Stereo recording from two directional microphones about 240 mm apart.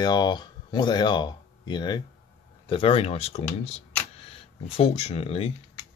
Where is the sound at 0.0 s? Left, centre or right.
Centre.